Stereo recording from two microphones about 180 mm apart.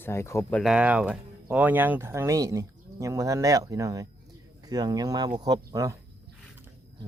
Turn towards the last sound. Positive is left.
turn(degrees=-20)  # may be behind; listen again after turning